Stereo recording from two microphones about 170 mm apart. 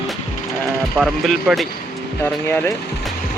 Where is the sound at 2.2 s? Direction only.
15° left (ahead or behind).